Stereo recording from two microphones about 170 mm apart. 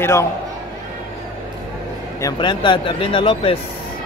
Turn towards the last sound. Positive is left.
turn(degrees=35)  # may be behind; listen again after turning